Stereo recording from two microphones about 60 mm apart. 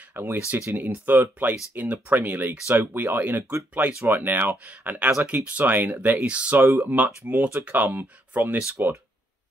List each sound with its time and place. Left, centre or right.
0.1 s speech: right
6.1 s speech: centre
6.8 s speech: right